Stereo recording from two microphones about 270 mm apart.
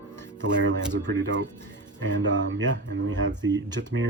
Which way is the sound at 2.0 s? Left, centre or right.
Right.